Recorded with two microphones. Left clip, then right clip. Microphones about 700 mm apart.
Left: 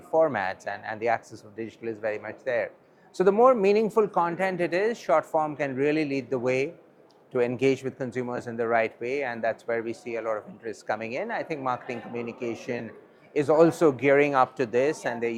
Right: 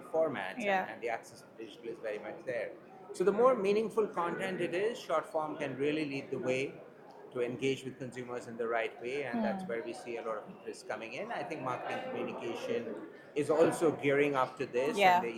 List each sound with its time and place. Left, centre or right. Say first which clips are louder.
0.1 s speech: left 9 dB; left